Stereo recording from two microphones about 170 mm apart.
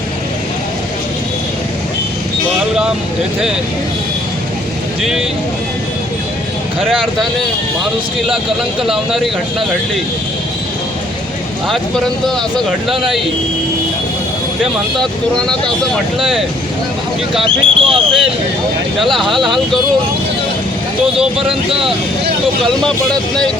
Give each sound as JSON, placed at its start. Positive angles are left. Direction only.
{"t": 6.9, "sound": "speech", "side_deg": 0}
{"t": 8.8, "sound": "speech", "side_deg": 0}
{"t": 11.7, "sound": "speech", "side_deg": 0}
{"t": 17.4, "sound": "speech", "side_deg": -35}
{"t": 22.6, "sound": "speech", "side_deg": 5}